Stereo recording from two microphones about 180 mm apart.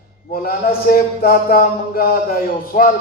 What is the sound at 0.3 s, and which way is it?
A man's voice, 55° left (ahead or behind).